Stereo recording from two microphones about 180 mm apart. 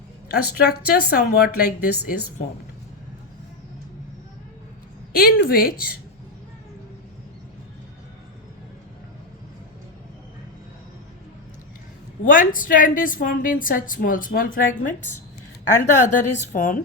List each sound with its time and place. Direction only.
0.3 s a woman's voice: 60° left (ahead or behind)
5.1 s a woman's voice: 55° left (ahead or behind)
12.2 s a woman's voice: 50° left (ahead or behind)